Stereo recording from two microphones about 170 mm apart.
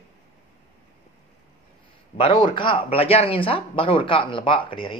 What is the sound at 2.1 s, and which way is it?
Speech, 30° left (ahead or behind).